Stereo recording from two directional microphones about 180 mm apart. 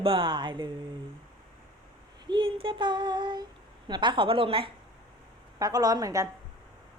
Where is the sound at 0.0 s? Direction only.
30° right (ahead or behind).